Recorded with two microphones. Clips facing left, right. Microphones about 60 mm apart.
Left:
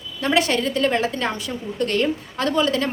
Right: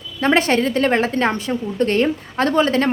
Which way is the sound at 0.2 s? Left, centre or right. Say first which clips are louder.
Right 4 dB; right.